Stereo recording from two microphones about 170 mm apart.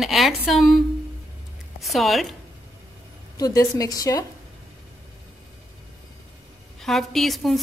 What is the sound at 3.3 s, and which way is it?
Speech, 20° left (ahead or behind).